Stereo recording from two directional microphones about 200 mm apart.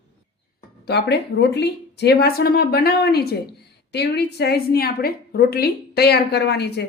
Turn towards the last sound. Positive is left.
turn(degrees=55)  # may be behind; listen again after turning